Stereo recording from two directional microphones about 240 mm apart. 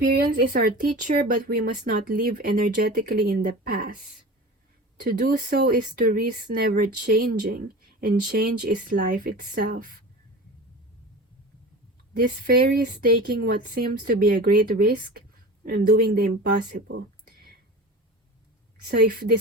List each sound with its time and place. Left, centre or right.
0.0 s speech: right
12.1 s speech: right
18.9 s speech: right